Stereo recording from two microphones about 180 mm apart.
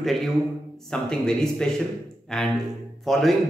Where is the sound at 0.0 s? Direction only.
Centre (ahead or behind).